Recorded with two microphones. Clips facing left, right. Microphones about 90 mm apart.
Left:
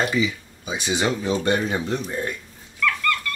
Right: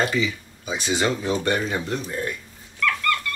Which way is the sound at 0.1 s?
15° left (ahead or behind).